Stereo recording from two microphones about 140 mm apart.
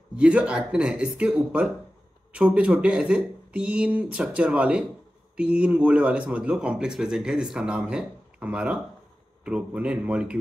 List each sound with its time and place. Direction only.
0.1 s speech: 10° right (ahead or behind)